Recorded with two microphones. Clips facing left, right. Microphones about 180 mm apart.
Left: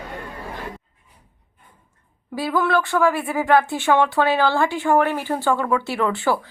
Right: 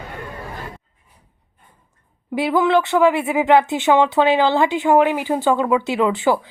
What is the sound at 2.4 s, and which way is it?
Speech, 20° right (ahead or behind).